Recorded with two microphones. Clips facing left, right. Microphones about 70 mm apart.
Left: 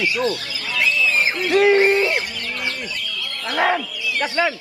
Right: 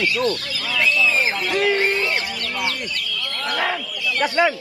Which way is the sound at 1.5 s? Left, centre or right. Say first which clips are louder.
Left 7 dB; centre.